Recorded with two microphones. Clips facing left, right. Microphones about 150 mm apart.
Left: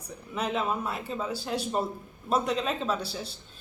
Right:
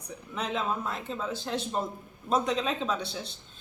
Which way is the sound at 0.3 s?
5° left (ahead or behind).